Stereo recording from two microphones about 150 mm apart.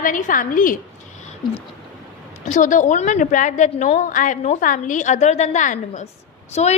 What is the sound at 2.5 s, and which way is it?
A woman's voice, 60° left (ahead or behind).